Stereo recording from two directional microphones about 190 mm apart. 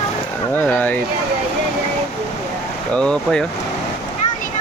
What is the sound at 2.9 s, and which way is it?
Speech, 5° left (ahead or behind).